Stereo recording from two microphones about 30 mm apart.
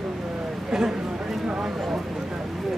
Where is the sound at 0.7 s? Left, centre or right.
Centre.